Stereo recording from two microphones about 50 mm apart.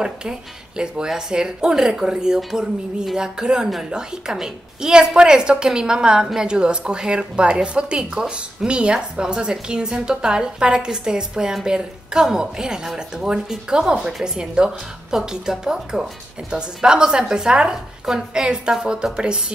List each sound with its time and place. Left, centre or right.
0.0 s a woman's voice: centre